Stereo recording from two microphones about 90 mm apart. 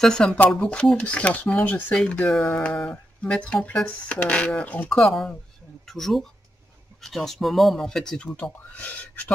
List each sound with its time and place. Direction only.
0.0 s speech: 5° left (ahead or behind)
4.8 s speech: centre (ahead or behind); by 9.3 s 20° left (ahead or behind)